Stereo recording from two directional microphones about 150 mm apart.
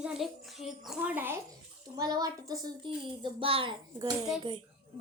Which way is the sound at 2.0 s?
25° right (ahead or behind).